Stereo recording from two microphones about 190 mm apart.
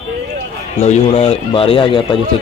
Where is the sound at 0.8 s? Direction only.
35° left (ahead or behind).